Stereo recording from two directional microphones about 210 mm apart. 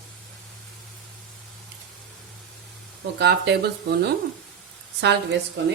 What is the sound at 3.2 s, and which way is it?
Speech, 50° right (ahead or behind).